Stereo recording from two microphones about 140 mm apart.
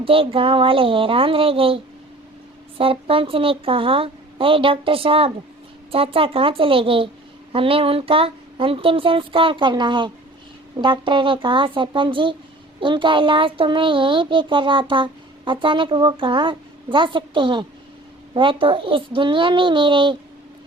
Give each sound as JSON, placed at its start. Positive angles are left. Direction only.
{"t": 0.0, "sound": "speech", "side_deg": -40}